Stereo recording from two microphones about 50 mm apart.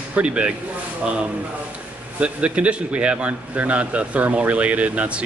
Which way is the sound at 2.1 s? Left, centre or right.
Right.